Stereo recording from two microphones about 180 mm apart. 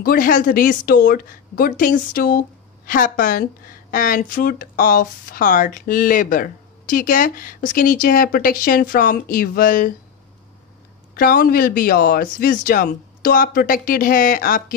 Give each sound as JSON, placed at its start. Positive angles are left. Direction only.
{"t": 0.0, "sound": "speech", "side_deg": 50}
{"t": 11.1, "sound": "speech", "side_deg": 55}